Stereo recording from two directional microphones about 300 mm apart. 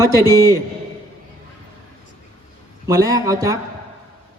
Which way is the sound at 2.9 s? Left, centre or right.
Centre.